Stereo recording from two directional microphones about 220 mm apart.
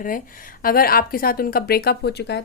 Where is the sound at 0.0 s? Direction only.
40° left (ahead or behind).